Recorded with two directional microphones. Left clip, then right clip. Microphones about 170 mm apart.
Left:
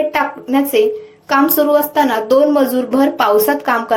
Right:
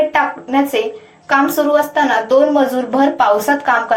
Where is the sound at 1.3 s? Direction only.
40° left (ahead or behind).